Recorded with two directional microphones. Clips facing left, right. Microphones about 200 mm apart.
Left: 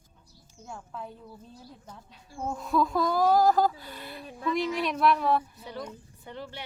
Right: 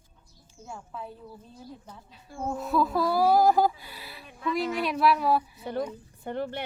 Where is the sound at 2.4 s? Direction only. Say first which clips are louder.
Right 1 dB; 5° right (ahead or behind).